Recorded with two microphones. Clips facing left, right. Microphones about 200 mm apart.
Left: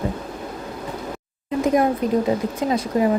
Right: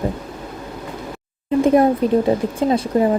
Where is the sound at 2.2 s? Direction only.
30° right (ahead or behind).